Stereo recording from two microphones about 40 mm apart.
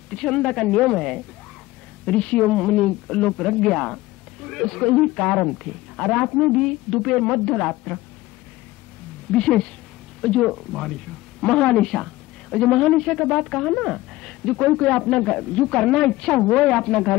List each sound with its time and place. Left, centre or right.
0.1 s speech: centre
2.0 s speech: left
2.5 s speech: centre
5.6 s speech: centre
6.4 s a woman's voice: centre
9.3 s speech: left
14.2 s a sound: centre
15.0 s speech: left